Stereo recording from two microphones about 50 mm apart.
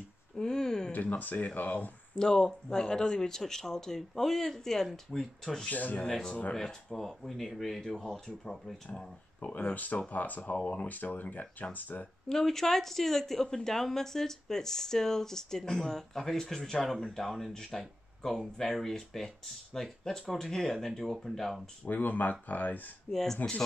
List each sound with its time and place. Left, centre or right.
0.4 s a sound: centre
1.0 s speech: left
2.1 s speech: centre
5.7 s speech: left
6.0 s speech: centre
9.4 s speech: left
12.3 s speech: centre
16.8 s speech: centre
17.7 s a sound: centre
18.6 s speech: centre
21.8 s speech: left
23.1 s speech: centre